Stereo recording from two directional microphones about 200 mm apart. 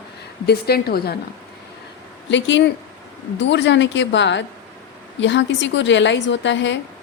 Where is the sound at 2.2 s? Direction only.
65° left (ahead or behind).